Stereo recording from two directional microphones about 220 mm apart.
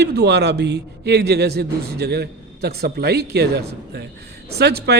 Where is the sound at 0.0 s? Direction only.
50° right (ahead or behind).